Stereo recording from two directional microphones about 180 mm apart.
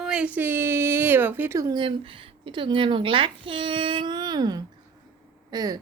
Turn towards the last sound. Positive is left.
turn(degrees=-20)  # may be behind; listen again after turning